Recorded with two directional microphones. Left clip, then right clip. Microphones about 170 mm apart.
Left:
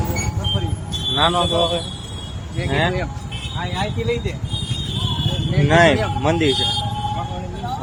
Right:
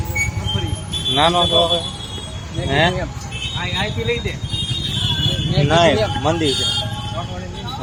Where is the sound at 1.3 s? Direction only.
Centre (ahead or behind).